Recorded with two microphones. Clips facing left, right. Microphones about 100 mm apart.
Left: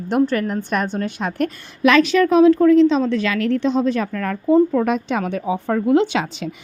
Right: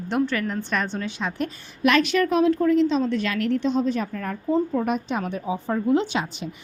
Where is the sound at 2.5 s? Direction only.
90° left.